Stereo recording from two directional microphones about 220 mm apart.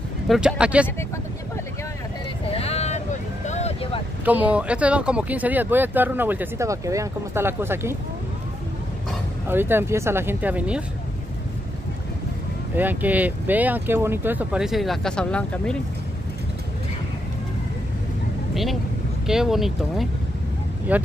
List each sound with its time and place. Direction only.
0.3 s speech: 5° right (ahead or behind)
2.5 s vehicle: 30° left (ahead or behind)
4.2 s speech: 5° right (ahead or behind)
9.5 s speech: 10° right (ahead or behind)
12.7 s speech: 10° right (ahead or behind)
18.5 s speech: centre (ahead or behind)